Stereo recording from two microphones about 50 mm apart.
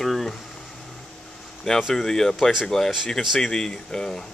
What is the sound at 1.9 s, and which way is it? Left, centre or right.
Speech, centre.